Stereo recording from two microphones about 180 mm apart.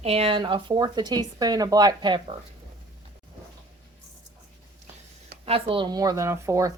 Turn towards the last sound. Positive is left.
turn(degrees=-15)  # may be behind; listen again after turning